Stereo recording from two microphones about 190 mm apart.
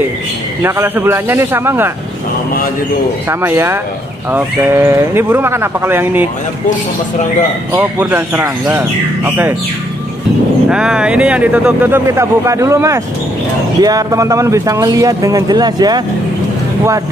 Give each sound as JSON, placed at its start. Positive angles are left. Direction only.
{"t": 0.6, "sound": "speech", "side_deg": -15}
{"t": 3.3, "sound": "speech", "side_deg": -15}
{"t": 7.7, "sound": "speech", "side_deg": -10}
{"t": 10.7, "sound": "speech", "side_deg": -5}